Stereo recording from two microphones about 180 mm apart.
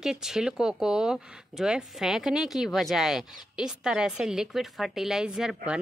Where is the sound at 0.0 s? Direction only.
5° right (ahead or behind).